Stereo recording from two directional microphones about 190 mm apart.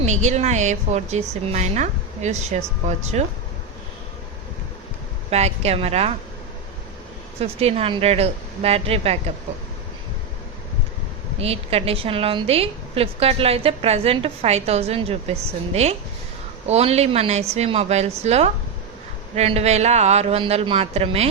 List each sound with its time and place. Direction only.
0.0 s a woman's voice: 40° right (ahead or behind)
5.3 s a woman's voice: 35° right (ahead or behind)
7.3 s a woman's voice: 30° right (ahead or behind)
11.3 s a woman's voice: 30° right (ahead or behind)